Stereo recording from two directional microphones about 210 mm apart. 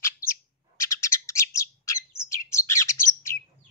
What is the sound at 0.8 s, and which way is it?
Bird, 15° left (ahead or behind).